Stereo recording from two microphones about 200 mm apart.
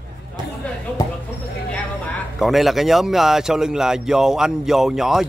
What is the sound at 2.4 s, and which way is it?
Speech, centre (ahead or behind).